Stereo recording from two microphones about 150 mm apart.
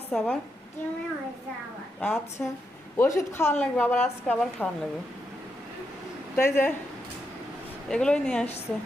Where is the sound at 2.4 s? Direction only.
10° left (ahead or behind).